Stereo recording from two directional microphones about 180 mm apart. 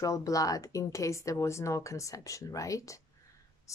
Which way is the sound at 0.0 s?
20° left (ahead or behind).